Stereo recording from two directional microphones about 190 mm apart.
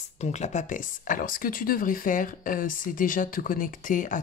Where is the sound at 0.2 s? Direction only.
35° left (ahead or behind).